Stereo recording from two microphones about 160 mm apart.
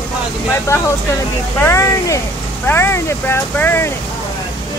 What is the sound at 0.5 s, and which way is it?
Speech, 15° left (ahead or behind).